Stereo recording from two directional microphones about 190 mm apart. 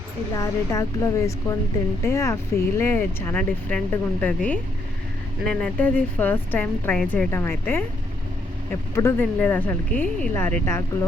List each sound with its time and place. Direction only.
0.3 s speech: 15° left (ahead or behind)
9.0 s speech: 10° left (ahead or behind)